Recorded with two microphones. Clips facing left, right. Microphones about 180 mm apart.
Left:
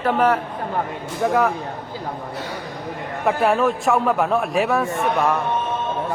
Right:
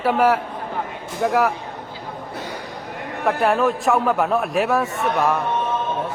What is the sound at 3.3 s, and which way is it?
Speech, centre (ahead or behind).